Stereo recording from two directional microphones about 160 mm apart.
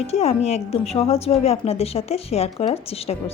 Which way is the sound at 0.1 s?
40° left (ahead or behind).